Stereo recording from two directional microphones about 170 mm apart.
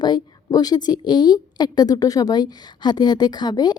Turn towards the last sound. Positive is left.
turn(degrees=25)  # may be behind; listen again after turning